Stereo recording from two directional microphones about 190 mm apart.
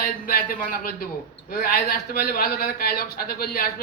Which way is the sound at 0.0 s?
50° left (ahead or behind).